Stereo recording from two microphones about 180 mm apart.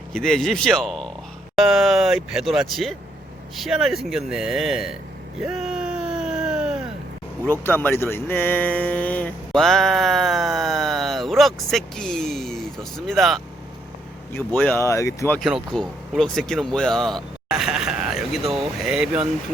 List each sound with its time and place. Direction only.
0.1 s speech: 5° left (ahead or behind)
5.4 s a sound: 5° right (ahead or behind)
7.4 s speech: 10° left (ahead or behind)
14.3 s speech: 10° left (ahead or behind)
15.4 s speech: centre (ahead or behind)